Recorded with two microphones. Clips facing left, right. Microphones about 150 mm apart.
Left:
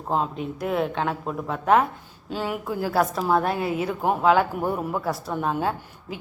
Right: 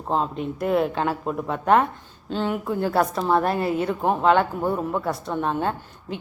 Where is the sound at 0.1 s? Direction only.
Centre (ahead or behind).